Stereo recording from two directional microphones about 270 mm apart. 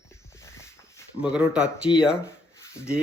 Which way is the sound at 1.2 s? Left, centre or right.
Centre.